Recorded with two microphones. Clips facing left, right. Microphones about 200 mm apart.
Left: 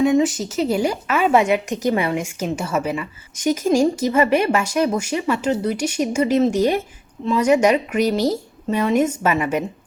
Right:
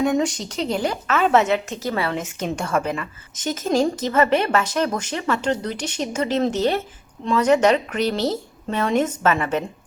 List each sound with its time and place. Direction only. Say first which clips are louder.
0.0 s speech: left 4 dB; 5° left (ahead or behind)